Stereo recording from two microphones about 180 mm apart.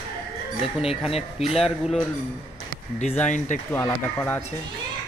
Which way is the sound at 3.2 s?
45° left (ahead or behind).